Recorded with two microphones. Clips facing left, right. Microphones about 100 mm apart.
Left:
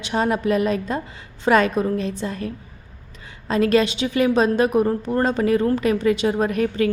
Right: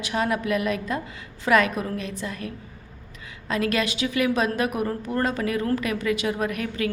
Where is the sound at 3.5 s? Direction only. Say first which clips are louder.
Left 7 dB; 30° left (ahead or behind).